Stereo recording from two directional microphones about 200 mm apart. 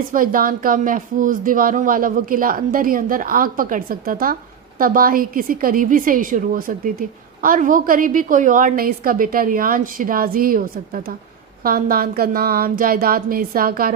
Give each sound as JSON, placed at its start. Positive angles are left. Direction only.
{"t": 0.1, "sound": "speech", "side_deg": -45}